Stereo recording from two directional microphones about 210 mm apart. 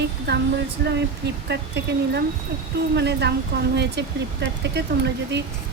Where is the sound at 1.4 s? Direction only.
55° right (ahead or behind).